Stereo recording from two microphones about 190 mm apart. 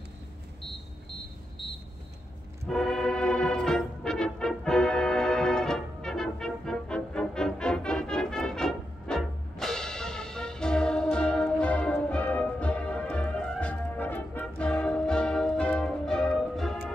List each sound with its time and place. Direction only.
2.6 s music: centre (ahead or behind)